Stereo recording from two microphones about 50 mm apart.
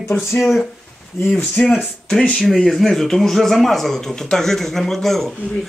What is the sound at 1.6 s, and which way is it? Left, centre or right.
A man's voice, centre.